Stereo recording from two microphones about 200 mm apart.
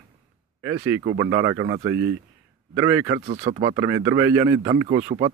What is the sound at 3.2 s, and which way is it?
Speech, 30° right (ahead or behind).